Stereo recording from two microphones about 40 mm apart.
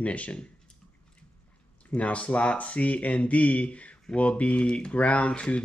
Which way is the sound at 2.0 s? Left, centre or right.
Left.